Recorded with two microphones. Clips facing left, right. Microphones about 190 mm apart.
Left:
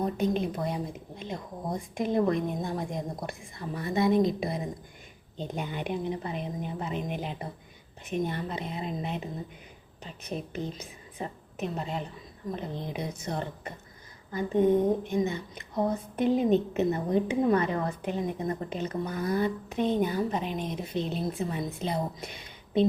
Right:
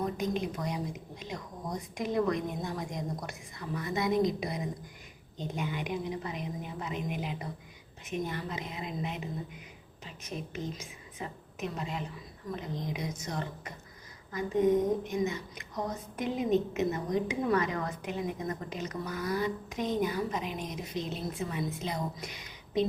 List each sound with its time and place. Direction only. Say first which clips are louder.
0.0 s a woman's voice: left 4 dB; 35° left (ahead or behind)